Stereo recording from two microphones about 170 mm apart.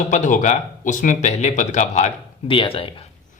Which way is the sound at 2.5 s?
30° left (ahead or behind).